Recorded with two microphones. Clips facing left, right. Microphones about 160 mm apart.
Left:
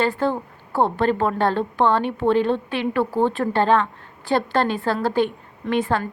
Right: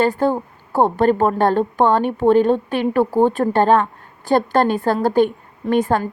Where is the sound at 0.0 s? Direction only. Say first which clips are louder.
Right 4 dB; 45° right (ahead or behind).